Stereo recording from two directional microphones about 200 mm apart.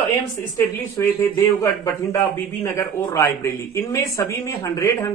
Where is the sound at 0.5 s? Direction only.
10° left (ahead or behind).